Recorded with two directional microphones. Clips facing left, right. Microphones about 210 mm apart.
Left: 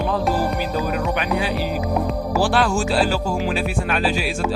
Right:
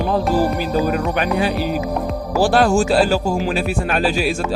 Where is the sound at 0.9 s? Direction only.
45° right (ahead or behind).